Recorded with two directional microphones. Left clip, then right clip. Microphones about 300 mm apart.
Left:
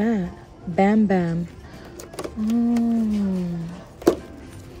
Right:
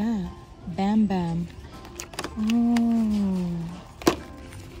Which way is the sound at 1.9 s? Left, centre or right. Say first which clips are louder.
Left 1 dB; centre.